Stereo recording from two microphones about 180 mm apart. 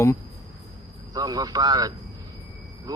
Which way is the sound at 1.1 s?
20° right (ahead or behind).